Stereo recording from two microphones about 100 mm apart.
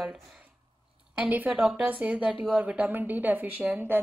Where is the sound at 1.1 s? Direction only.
15° right (ahead or behind).